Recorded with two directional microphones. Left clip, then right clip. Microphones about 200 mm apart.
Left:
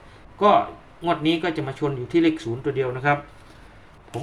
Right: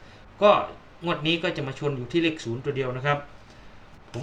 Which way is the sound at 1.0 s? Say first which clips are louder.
Left 3 dB; 15° left (ahead or behind).